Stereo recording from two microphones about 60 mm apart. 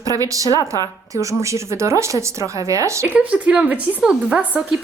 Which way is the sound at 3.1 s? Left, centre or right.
Right.